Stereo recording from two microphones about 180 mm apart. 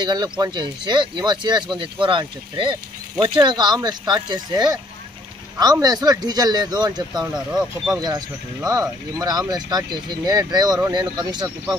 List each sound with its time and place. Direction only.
0.0 s speech: 25° right (ahead or behind)